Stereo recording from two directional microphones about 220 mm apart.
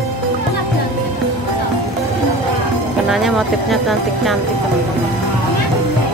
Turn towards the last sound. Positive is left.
turn(degrees=0)  # may be behind; listen again after turning